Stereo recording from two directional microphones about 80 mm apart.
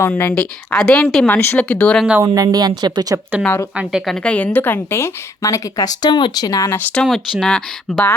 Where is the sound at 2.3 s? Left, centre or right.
Right.